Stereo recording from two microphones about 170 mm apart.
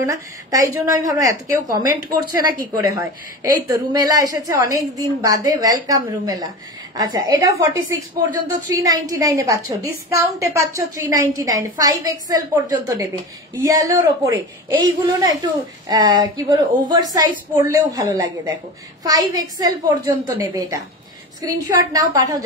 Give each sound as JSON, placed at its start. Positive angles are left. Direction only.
{"t": 0.0, "sound": "a woman's voice", "side_deg": -20}